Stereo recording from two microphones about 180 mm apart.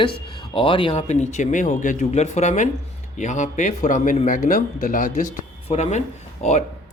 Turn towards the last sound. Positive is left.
turn(degrees=40)  # may be behind; listen again after turning